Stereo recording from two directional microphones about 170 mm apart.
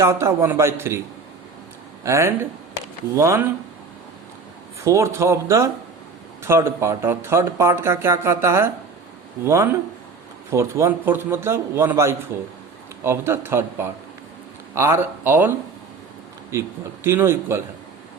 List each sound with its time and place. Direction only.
0.0 s speech: 15° right (ahead or behind)
2.0 s speech: 15° right (ahead or behind)
4.8 s speech: 15° right (ahead or behind)